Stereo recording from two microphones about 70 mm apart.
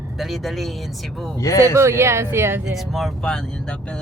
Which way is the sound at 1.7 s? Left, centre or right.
Right.